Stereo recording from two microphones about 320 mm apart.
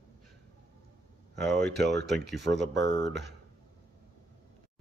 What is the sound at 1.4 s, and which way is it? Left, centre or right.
Speech, centre.